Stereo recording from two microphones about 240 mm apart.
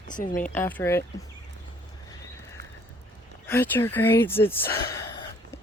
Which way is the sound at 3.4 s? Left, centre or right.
Centre.